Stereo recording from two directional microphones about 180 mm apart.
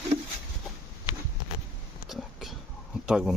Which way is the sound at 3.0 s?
5° right (ahead or behind).